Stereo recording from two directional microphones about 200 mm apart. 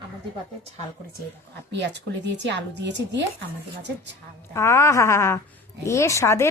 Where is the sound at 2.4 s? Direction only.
60° right (ahead or behind).